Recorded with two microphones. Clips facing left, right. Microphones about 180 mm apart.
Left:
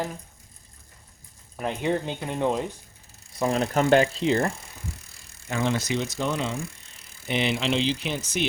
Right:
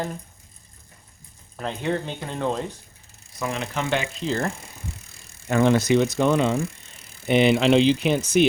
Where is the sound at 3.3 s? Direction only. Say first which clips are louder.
Left 5 dB; 35° left (ahead or behind).